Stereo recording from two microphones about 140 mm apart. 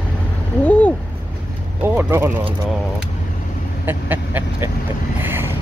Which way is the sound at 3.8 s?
15° right (ahead or behind).